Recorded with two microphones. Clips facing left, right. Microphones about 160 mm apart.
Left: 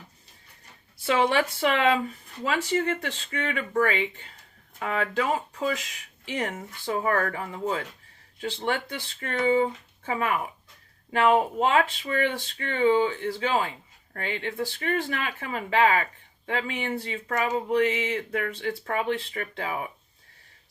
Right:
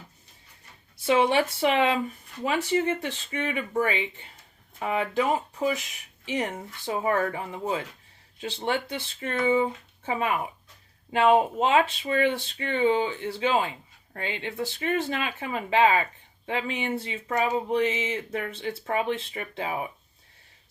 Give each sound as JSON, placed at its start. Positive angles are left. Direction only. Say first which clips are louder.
{"t": 1.1, "sound": "speech", "louder": "right 1 dB", "side_deg": -15}